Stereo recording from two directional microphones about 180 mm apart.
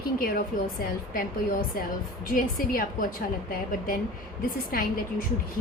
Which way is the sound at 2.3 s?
50° left (ahead or behind).